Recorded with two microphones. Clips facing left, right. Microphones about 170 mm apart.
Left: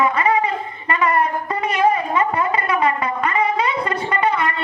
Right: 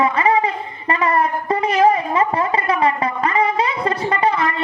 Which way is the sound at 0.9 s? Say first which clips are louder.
Right 1 dB; 30° right (ahead or behind).